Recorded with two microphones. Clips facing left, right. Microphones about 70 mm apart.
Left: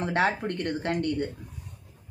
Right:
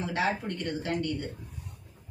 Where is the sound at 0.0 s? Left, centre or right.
Left.